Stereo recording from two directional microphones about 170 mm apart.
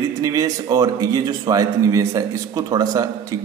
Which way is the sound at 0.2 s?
20° right (ahead or behind).